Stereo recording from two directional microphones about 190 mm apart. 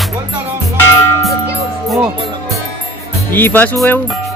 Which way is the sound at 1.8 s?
Centre (ahead or behind).